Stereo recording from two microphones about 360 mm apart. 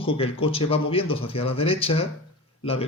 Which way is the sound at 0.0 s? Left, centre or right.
Centre.